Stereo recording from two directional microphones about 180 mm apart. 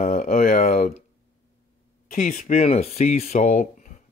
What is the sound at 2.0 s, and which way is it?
Speech, 45° left (ahead or behind).